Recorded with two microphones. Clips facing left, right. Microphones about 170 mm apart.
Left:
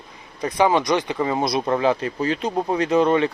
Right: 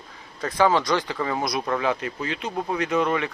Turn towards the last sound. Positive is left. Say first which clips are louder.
# left 6 dB
turn(degrees=30)  # may be behind; listen again after turning